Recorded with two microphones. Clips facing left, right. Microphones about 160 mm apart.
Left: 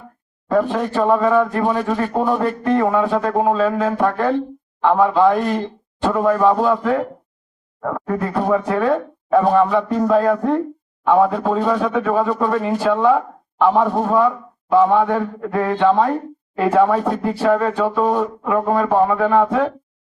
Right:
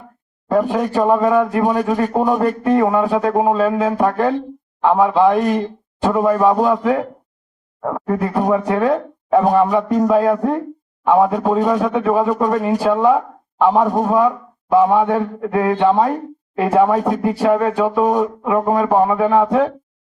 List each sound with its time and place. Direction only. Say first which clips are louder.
0.5 s speech: right 1 dB; 10° right (ahead or behind)